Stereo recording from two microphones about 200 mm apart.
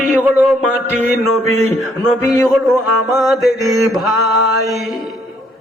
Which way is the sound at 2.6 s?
Centre (ahead or behind).